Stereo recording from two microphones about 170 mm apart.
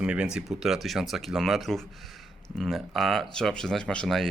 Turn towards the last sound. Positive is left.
turn(degrees=5)  # may be behind; listen again after turning